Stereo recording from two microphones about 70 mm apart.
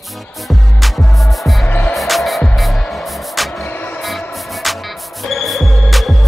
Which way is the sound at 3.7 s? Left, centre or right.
Left.